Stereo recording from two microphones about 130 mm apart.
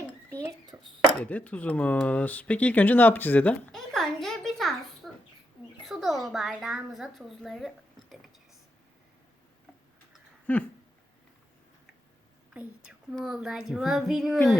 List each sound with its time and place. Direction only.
0.7 s speech: 15° right (ahead or behind)
1.2 s a woman's voice: 10° left (ahead or behind)
10.4 s a sound: 10° left (ahead or behind)
12.5 s a woman's voice: 10° right (ahead or behind)